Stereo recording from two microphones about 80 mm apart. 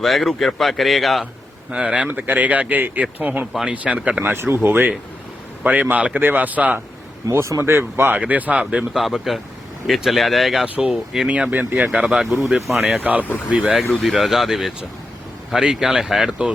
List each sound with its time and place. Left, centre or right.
0.0 s speech: centre
1.7 s speech: centre
7.3 s speech: right; by 9.0 s centre
9.0 s speech: centre
11.3 s speech: centre
12.8 s speech: centre
13.5 s speech: centre